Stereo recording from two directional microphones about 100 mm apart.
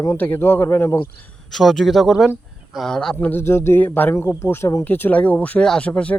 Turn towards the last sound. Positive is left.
turn(degrees=10)  # may be behind; listen again after turning